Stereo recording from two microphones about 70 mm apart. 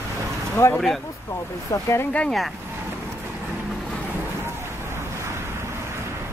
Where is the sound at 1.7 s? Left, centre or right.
Left.